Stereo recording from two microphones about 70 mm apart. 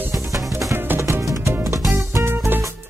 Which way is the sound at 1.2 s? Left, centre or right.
Right.